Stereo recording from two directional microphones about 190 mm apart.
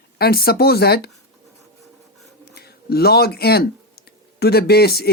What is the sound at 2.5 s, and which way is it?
Speech, 55° left (ahead or behind).